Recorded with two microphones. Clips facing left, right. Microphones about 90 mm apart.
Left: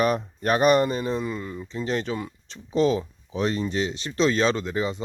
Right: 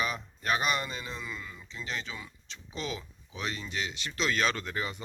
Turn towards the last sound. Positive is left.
turn(degrees=25)  # may be behind; listen again after turning